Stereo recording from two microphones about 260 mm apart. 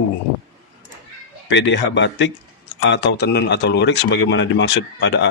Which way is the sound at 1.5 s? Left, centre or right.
Left.